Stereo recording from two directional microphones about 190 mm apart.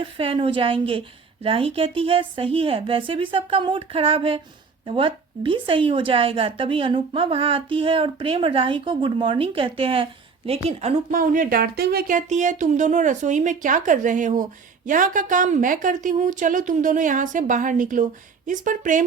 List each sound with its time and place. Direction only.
0.0 s a woman's voice: 30° right (ahead or behind)